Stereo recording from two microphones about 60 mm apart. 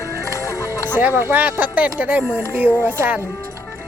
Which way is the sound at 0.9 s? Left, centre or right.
Right.